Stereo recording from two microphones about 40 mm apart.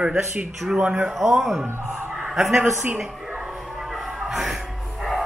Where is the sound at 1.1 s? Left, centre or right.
Centre.